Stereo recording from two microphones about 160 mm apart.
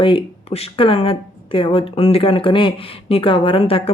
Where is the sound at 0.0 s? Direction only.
30° left (ahead or behind).